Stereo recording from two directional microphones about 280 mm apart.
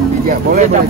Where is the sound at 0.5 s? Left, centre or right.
Right.